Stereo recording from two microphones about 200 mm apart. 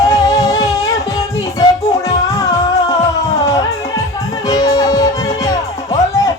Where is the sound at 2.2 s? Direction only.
15° left (ahead or behind).